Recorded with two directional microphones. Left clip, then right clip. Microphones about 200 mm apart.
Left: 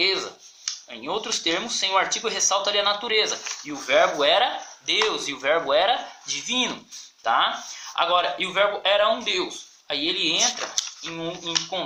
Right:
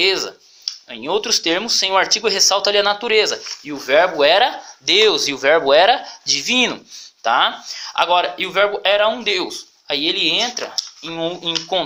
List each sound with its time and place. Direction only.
1.0 s speech: 45° right (ahead or behind)